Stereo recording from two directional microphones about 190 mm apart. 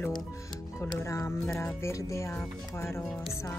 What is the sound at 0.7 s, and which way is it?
Speech, 15° left (ahead or behind).